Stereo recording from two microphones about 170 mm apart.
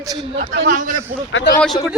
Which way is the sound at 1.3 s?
90° left.